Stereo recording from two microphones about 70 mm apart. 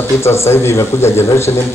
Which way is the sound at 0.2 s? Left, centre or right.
Left.